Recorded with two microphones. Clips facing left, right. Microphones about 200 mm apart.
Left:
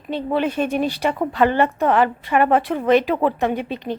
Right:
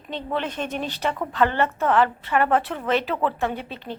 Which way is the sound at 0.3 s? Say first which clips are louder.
Left 7 dB; 10° left (ahead or behind).